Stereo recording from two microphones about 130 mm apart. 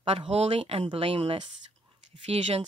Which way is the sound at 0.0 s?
45° right (ahead or behind).